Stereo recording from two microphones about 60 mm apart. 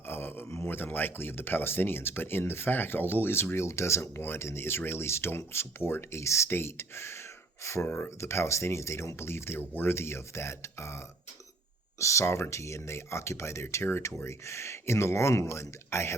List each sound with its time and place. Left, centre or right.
0.1 s speech: left
7.9 s speech: left
8.2 s speech: left
13.8 s speech: left